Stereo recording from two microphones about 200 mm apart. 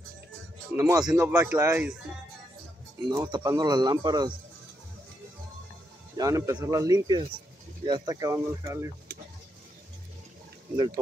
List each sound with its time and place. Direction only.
0.7 s speech: 20° right (ahead or behind)
3.1 s speech: 20° right (ahead or behind)
6.1 s speech: 15° right (ahead or behind)